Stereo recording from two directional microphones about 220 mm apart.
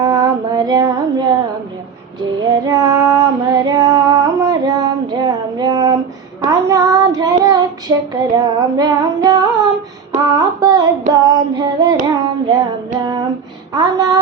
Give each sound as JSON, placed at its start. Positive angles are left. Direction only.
{"t": 0.0, "sound": "female singing", "side_deg": -15}
{"t": 2.4, "sound": "female singing", "side_deg": -15}
{"t": 6.4, "sound": "child singing", "side_deg": -15}
{"t": 7.4, "sound": "female singing", "side_deg": -15}
{"t": 10.2, "sound": "a sound", "side_deg": -15}
{"t": 11.1, "sound": "female singing", "side_deg": -20}
{"t": 12.0, "sound": "child singing", "side_deg": -15}
{"t": 13.7, "sound": "a sound", "side_deg": -15}